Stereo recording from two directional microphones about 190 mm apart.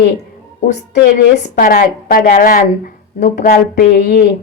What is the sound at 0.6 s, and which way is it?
Speech, 45° left (ahead or behind).